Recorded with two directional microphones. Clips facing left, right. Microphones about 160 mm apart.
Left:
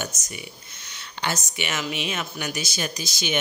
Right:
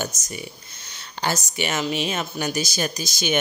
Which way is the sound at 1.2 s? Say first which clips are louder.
Right 4 dB; 35° right (ahead or behind).